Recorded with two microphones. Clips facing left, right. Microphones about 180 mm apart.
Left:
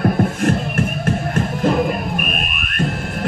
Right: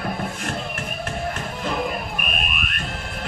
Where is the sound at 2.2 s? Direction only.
45° left (ahead or behind).